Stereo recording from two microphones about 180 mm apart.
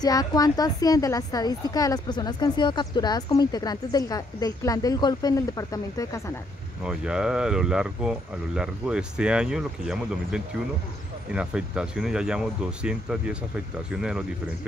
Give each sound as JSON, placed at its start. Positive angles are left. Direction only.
{"t": 0.0, "sound": "a woman's voice", "side_deg": 20}
{"t": 6.8, "sound": "speech", "side_deg": -5}